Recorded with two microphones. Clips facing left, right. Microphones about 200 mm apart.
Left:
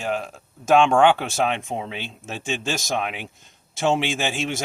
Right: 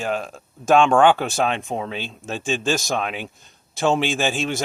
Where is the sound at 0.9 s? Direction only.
50° right (ahead or behind).